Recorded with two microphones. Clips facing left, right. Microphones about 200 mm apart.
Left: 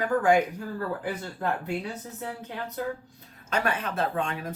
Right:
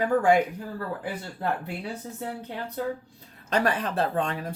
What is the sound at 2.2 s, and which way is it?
Speech, 30° right (ahead or behind).